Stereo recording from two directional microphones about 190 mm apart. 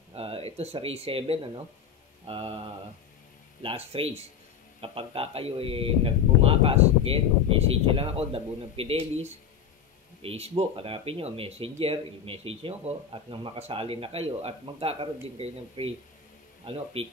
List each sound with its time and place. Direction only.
0.1 s speech: 30° right (ahead or behind)